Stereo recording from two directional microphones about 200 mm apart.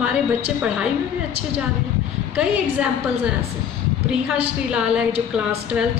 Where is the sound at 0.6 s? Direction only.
5° right (ahead or behind).